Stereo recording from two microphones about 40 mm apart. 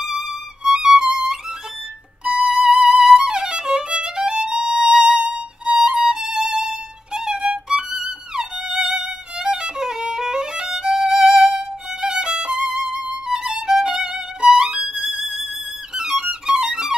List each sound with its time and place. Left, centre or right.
0.8 s music: centre
3.2 s violin: centre
12.7 s violin: centre
15.0 s violin: centre
15.9 s music: centre